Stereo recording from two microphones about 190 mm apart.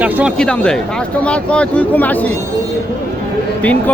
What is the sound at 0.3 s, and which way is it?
Speech, 5° left (ahead or behind).